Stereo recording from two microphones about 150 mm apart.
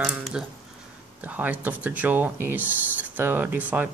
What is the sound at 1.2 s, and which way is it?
Speech, 10° right (ahead or behind).